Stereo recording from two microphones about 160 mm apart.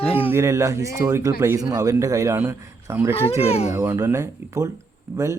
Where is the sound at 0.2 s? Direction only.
15° right (ahead or behind).